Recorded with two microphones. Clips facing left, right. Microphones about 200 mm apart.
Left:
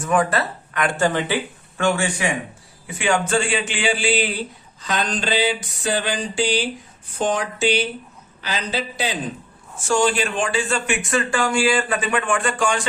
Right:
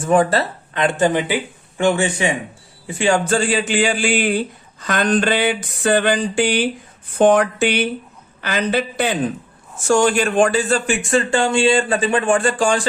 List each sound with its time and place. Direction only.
0.0 s a man's voice: 30° right (ahead or behind); by 9.1 s 55° right (ahead or behind)
9.8 s speech: 45° right (ahead or behind)